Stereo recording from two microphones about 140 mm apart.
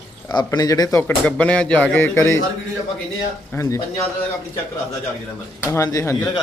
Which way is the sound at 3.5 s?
20° left (ahead or behind).